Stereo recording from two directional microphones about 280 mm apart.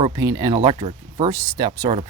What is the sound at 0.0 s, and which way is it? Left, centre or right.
Speech, centre.